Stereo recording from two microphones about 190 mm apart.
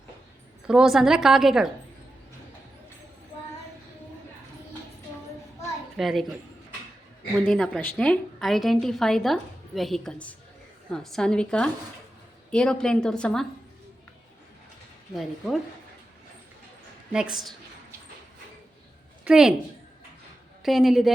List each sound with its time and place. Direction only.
0.7 s a woman's voice: 5° right (ahead or behind)
6.0 s a woman's voice: centre (ahead or behind)
7.3 s a woman's voice: 5° left (ahead or behind)
15.1 s a woman's voice: centre (ahead or behind)
17.1 s a woman's voice: 5° right (ahead or behind)
19.2 s a woman's voice: 5° right (ahead or behind)
20.6 s a woman's voice: centre (ahead or behind)